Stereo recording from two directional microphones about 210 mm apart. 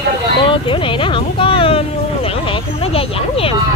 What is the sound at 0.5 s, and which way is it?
Vehicle, 25° left (ahead or behind).